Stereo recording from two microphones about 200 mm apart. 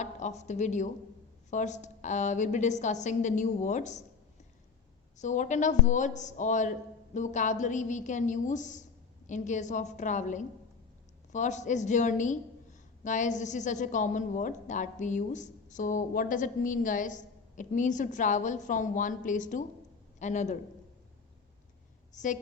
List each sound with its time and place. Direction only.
0.0 s a woman's voice: 35° left (ahead or behind)
5.1 s a woman's voice: 35° left (ahead or behind)
22.1 s a woman's voice: 40° left (ahead or behind)